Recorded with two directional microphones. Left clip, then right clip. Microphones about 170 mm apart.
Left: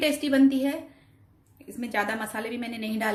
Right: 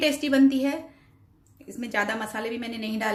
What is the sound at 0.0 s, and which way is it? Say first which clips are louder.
A woman's voice: right 1 dB; 5° right (ahead or behind).